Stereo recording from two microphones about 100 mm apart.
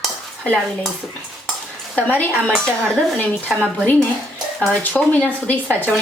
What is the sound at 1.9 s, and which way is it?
Speech, 15° left (ahead or behind).